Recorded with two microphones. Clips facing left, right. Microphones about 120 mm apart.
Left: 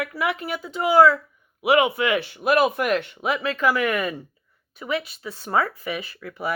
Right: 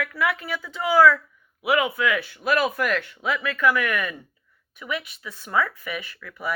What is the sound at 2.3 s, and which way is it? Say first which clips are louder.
A woman's voice: left 3 dB; 25° left (ahead or behind).